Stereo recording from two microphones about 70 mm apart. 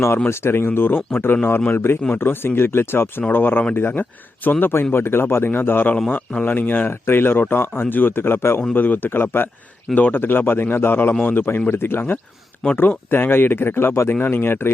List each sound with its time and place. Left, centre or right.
0.3 s a man's voice: left